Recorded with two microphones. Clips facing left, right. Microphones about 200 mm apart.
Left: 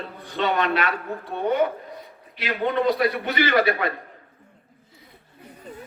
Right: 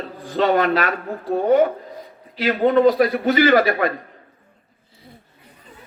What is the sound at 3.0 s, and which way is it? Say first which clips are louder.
Speech: right 6 dB; 50° right (ahead or behind).